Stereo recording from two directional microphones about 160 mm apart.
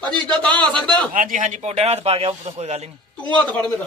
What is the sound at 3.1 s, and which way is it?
Speech, 10° left (ahead or behind).